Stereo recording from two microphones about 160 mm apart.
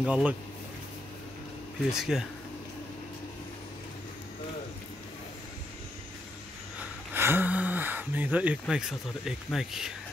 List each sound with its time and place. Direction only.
0.0 s speech: 10° right (ahead or behind)
1.9 s speech: 5° right (ahead or behind)
7.2 s speech: 15° right (ahead or behind)